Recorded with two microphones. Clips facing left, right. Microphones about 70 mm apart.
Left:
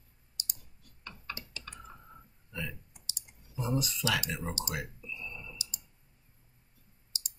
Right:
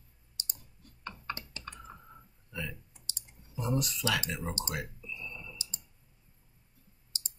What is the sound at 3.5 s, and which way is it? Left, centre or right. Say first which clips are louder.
Speech: even; centre.